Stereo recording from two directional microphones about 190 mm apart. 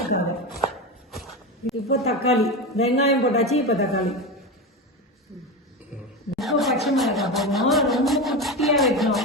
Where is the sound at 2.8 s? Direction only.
35° left (ahead or behind).